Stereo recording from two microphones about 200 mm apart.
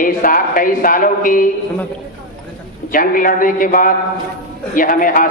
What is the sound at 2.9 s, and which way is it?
A man's voice, 45° left (ahead or behind).